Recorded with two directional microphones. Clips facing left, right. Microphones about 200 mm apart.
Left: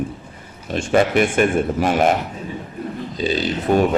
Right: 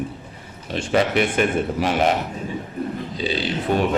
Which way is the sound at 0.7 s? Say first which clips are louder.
Left 3 dB; 50° left (ahead or behind).